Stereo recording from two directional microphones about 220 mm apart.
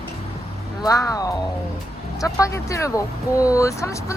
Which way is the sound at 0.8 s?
15° left (ahead or behind).